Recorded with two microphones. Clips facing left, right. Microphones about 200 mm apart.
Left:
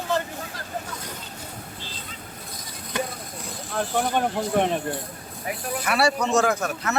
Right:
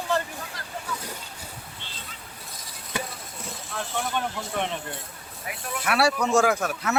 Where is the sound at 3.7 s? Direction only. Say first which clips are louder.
Left 6 dB; 45° left (ahead or behind).